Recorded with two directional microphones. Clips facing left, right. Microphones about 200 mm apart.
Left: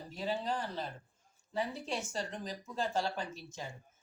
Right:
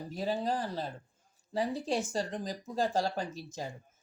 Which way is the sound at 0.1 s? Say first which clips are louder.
Right 3 dB; 40° right (ahead or behind).